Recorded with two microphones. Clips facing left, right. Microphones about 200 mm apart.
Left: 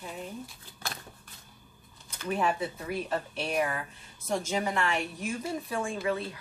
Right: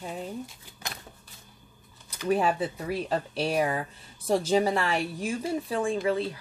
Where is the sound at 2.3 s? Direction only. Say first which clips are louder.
Right 1 dB; 35° right (ahead or behind).